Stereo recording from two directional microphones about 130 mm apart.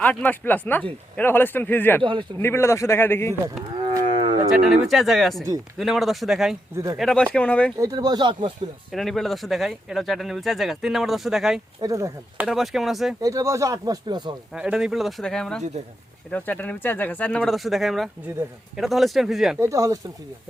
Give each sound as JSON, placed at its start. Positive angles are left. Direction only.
{"t": 0.0, "sound": "a man's voice", "side_deg": 10}
{"t": 3.8, "sound": "cattle", "side_deg": -40}
{"t": 4.6, "sound": "speech", "side_deg": 0}
{"t": 7.8, "sound": "speech", "side_deg": -30}
{"t": 8.9, "sound": "speech", "side_deg": 0}
{"t": 11.8, "sound": "speech", "side_deg": -25}
{"t": 12.4, "sound": "speech", "side_deg": 0}
{"t": 13.2, "sound": "speech", "side_deg": -25}
{"t": 14.5, "sound": "speech", "side_deg": -5}
{"t": 19.5, "sound": "speech", "side_deg": -25}